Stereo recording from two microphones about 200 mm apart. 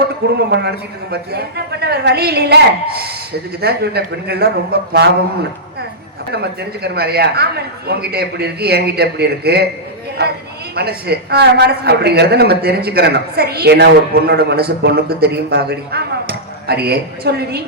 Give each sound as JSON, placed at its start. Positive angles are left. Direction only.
{"t": 0.3, "sound": "a man's voice", "side_deg": -55}
{"t": 3.6, "sound": "a man's voice", "side_deg": -55}
{"t": 6.3, "sound": "a man's voice", "side_deg": -55}